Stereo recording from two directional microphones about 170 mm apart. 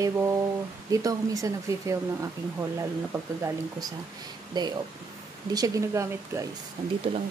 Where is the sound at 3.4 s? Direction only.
20° right (ahead or behind).